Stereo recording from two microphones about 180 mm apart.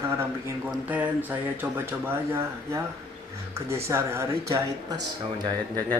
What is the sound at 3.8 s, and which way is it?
Speech, 15° right (ahead or behind).